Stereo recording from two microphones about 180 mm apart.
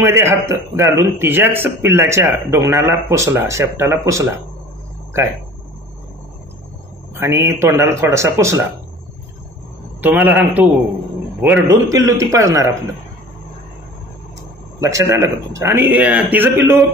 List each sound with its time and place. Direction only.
0.0 s a man's voice: 15° right (ahead or behind)
7.2 s a man's voice: 15° right (ahead or behind)
10.0 s a man's voice: 10° right (ahead or behind)
14.8 s a man's voice: 15° right (ahead or behind)